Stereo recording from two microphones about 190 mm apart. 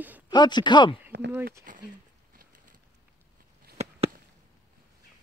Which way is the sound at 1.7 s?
45° right (ahead or behind).